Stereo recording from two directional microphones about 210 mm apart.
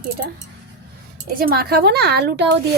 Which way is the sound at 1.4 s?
45° right (ahead or behind).